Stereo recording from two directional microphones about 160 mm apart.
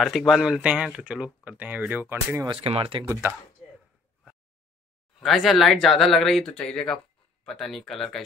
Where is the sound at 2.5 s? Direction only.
35° right (ahead or behind).